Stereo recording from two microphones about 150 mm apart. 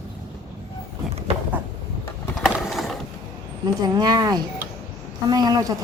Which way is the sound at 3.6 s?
25° right (ahead or behind).